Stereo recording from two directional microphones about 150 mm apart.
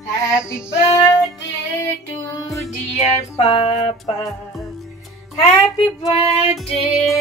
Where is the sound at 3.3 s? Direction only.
35° left (ahead or behind).